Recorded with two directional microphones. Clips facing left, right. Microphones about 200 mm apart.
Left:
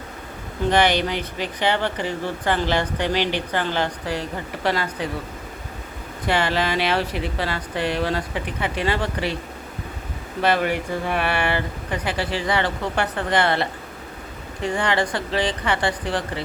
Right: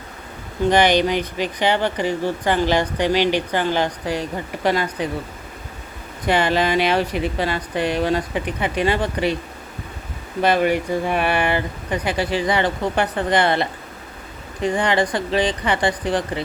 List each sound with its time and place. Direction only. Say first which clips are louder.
0.7 s speech: right 3 dB; 15° right (ahead or behind)
6.2 s speech: right 3 dB; 15° right (ahead or behind)
10.4 s speech: right 3 dB; 15° right (ahead or behind)